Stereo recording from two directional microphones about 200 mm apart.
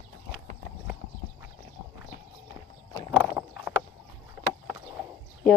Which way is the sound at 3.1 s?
5° right (ahead or behind).